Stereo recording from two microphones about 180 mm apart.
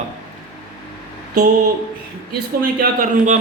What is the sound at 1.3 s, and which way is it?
Speech, 55° right (ahead or behind).